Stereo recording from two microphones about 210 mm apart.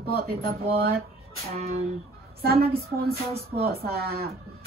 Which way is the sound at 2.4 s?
45° right (ahead or behind).